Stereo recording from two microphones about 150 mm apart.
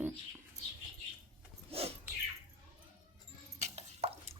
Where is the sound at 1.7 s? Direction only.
40° right (ahead or behind).